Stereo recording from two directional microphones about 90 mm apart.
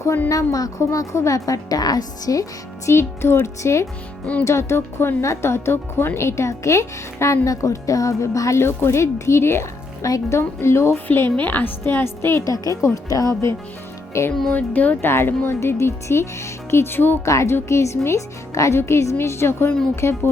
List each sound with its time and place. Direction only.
0.0 s a woman's voice: 30° left (ahead or behind)
14.5 s a woman's voice: 15° left (ahead or behind)